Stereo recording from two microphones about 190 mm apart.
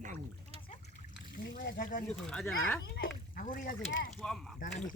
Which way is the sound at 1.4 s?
50° left (ahead or behind).